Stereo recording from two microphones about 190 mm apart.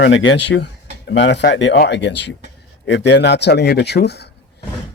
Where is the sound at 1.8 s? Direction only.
65° left (ahead or behind).